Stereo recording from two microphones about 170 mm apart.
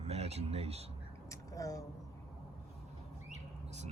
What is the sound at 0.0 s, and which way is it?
Speech, 40° right (ahead or behind).